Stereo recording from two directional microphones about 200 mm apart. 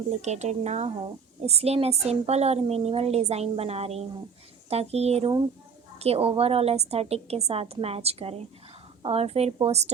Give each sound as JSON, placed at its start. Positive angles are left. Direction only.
{"t": 0.2, "sound": "a woman's voice", "side_deg": -35}